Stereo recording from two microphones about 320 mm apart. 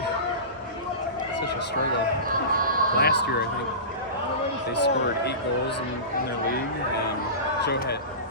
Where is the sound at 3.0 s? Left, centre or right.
Left.